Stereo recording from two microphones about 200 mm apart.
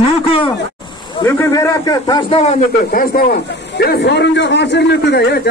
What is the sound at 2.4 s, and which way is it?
Speech, 35° left (ahead or behind).